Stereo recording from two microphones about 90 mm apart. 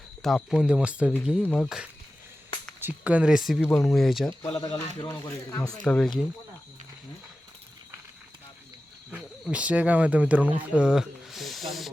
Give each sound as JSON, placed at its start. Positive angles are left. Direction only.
{"t": 0.2, "sound": "speech", "side_deg": 0}
{"t": 0.7, "sound": "speech", "side_deg": -10}
{"t": 1.5, "sound": "speech", "side_deg": 0}
{"t": 2.8, "sound": "speech", "side_deg": -15}
{"t": 4.4, "sound": "speech", "side_deg": 75}
{"t": 5.5, "sound": "speech", "side_deg": 40}
{"t": 5.7, "sound": "speech", "side_deg": 10}
{"t": 9.1, "sound": "speech", "side_deg": -15}